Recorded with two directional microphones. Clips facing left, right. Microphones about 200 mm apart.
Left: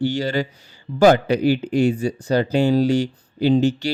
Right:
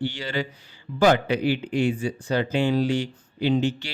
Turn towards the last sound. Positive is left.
turn(degrees=40)  # may be behind; listen again after turning